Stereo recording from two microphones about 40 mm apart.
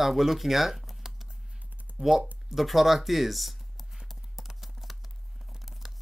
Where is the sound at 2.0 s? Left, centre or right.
Centre.